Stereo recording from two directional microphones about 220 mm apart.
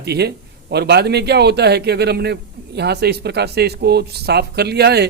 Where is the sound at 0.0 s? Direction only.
50° right (ahead or behind).